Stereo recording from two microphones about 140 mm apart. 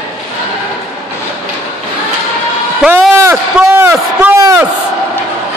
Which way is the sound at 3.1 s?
20° right (ahead or behind).